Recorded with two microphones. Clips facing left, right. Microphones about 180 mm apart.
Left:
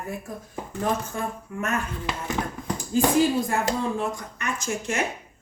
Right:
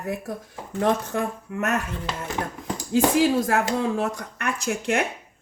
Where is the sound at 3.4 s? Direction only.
80° right.